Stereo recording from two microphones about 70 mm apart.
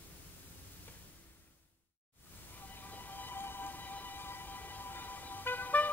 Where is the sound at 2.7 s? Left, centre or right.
Left.